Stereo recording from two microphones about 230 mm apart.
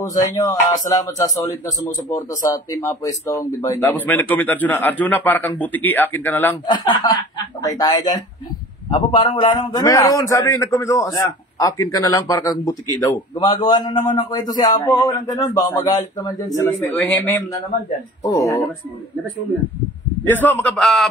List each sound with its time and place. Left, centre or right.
0.3 s a man's voice: centre
6.6 s a man's voice: centre
20.2 s a man's voice: centre